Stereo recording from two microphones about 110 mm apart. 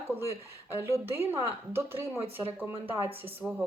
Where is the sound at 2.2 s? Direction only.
60° right (ahead or behind).